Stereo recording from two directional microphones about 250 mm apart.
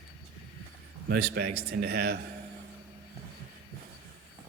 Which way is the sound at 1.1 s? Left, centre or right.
Right.